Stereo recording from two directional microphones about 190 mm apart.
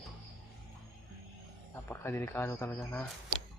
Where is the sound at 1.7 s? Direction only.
10° left (ahead or behind).